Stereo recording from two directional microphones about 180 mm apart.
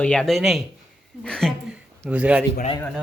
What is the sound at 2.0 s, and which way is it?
Speech, 5° right (ahead or behind).